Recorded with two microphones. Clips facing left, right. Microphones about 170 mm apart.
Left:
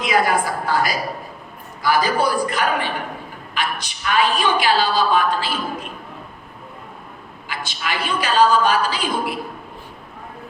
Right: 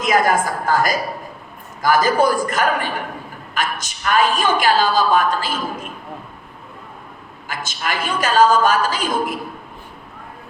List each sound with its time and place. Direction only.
0.0 s a woman's voice: 45° right (ahead or behind)
7.4 s a woman's voice: 45° right (ahead or behind)